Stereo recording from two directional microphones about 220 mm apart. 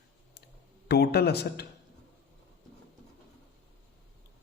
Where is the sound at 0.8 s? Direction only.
45° left (ahead or behind).